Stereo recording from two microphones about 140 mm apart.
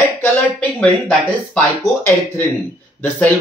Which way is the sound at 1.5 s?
15° left (ahead or behind).